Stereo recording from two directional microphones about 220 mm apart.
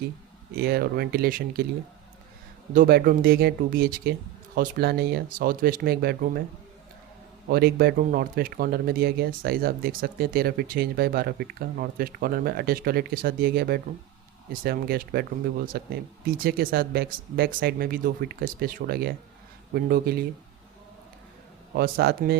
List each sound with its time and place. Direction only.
0.5 s speech: 45° right (ahead or behind)
2.7 s speech: 45° right (ahead or behind)
7.5 s speech: 45° right (ahead or behind)
21.8 s speech: 45° right (ahead or behind)